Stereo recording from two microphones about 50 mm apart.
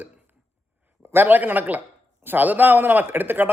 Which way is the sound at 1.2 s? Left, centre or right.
Right.